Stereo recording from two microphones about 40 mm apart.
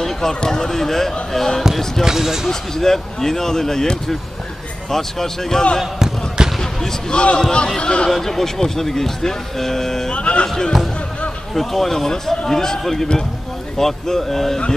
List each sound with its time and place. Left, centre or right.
0.0 s speech: centre
2.0 s speech: centre
2.7 s speech: centre
4.8 s speech: centre
5.9 s basketball bounce: centre
6.6 s basketball bounce: centre
7.1 s speech: left
8.1 s speech: centre
10.1 s speech: left
11.5 s speech: centre